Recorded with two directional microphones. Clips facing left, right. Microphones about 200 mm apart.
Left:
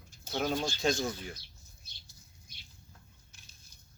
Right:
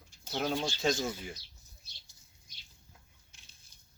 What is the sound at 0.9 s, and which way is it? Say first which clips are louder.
Speech: even; 5° right (ahead or behind).